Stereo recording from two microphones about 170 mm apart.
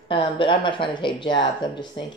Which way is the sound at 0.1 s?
30° left (ahead or behind).